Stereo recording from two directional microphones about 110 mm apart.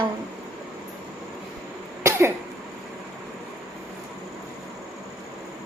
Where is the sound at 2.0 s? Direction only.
25° right (ahead or behind).